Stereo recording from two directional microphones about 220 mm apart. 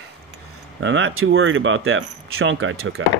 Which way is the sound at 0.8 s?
60° right (ahead or behind).